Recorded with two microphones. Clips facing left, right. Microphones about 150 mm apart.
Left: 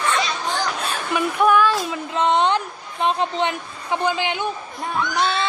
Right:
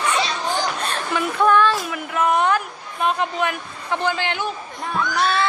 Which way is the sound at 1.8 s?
25° left (ahead or behind).